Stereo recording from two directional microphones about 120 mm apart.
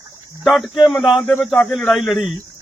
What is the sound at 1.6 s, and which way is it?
Speech, 15° left (ahead or behind).